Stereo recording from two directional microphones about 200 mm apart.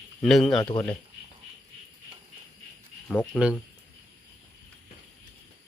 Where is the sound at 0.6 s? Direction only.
20° left (ahead or behind).